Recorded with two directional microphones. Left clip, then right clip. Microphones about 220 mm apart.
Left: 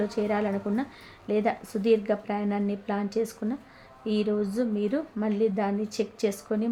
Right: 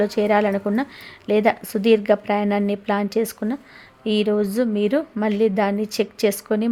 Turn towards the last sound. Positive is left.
turn(degrees=-40)  # may be behind; listen again after turning